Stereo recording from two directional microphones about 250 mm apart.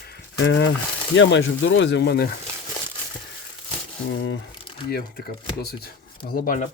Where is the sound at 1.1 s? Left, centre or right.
Left.